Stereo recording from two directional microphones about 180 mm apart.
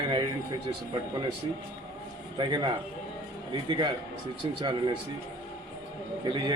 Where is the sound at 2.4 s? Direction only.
25° right (ahead or behind).